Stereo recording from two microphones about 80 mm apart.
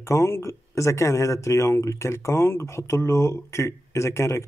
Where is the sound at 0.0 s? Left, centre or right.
Left.